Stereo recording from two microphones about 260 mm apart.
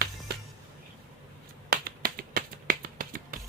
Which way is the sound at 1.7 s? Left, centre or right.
Right.